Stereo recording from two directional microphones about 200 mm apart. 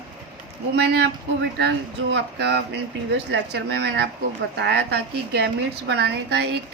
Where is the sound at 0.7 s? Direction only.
55° right (ahead or behind).